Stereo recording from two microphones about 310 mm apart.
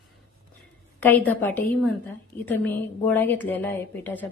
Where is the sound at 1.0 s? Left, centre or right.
Centre.